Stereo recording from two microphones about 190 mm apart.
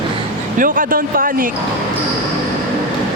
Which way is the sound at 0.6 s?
45° right (ahead or behind).